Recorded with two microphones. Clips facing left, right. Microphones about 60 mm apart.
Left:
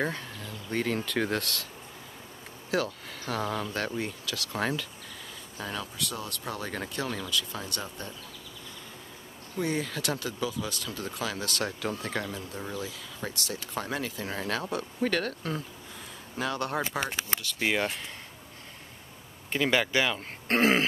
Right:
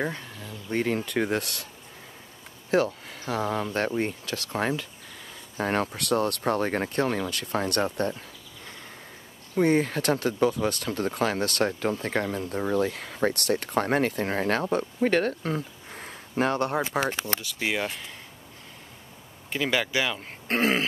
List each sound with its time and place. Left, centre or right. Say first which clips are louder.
0.0 s speech: right 1 dB; centre
2.7 s speech: right 6 dB; right
5.6 s speech: right 9 dB; right
9.6 s speech: right 8 dB; right
12.7 s speech: right 11 dB; right
15.9 s a sound: right 6 dB; right
16.6 s speech: right 4 dB; right
17.6 s speech: left 2 dB; centre
19.5 s speech: even; centre